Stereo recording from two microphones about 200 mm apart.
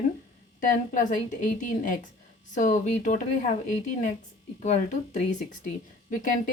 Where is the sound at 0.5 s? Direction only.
40° left (ahead or behind).